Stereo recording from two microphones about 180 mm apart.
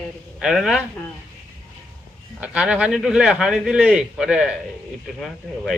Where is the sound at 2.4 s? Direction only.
5° right (ahead or behind).